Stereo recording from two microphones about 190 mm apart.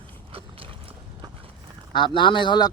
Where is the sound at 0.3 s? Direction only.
30° right (ahead or behind).